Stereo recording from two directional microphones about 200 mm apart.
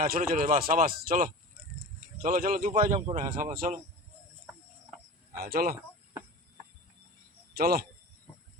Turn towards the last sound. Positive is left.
turn(degrees=-50)  # may be behind; listen again after turning